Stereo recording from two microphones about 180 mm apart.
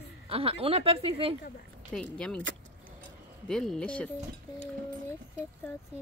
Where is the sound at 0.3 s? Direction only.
35° right (ahead or behind).